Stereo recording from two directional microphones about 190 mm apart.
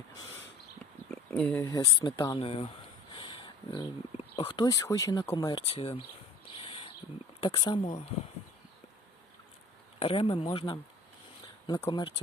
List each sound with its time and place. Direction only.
1.1 s speech: 5° left (ahead or behind)
2.0 s speech: 20° left (ahead or behind)
6.7 s bird: 30° left (ahead or behind)
7.4 s speech: 25° left (ahead or behind)
10.0 s speech: 30° left (ahead or behind)